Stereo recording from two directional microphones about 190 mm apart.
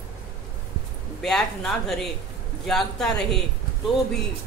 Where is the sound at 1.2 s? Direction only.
Centre (ahead or behind).